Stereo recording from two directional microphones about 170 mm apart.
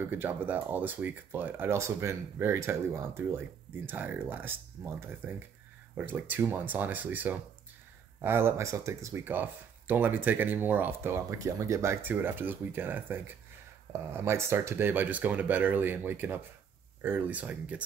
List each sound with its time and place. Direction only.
0.0 s speech: 10° right (ahead or behind)